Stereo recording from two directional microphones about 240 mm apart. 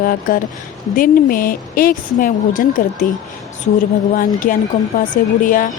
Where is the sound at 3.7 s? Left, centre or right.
Left.